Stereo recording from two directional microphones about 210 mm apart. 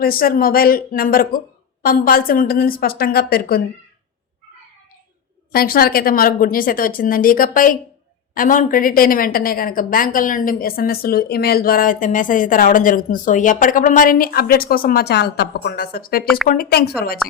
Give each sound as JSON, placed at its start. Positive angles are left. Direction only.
{"t": 0.0, "sound": "a woman's voice", "side_deg": 45}
{"t": 5.5, "sound": "a woman's voice", "side_deg": 45}